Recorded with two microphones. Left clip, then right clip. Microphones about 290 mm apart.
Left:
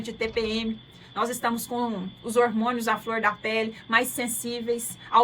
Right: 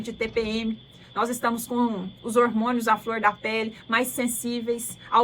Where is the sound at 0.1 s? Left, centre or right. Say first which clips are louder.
Right 1 dB; centre.